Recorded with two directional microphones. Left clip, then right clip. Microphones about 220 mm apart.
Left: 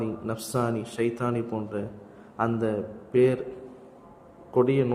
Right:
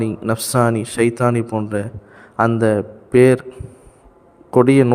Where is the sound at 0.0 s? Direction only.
45° right (ahead or behind).